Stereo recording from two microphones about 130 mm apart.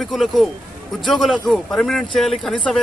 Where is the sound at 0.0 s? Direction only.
Centre (ahead or behind).